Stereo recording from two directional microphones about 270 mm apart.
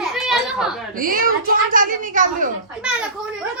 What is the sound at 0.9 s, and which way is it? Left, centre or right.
A woman's voice, right.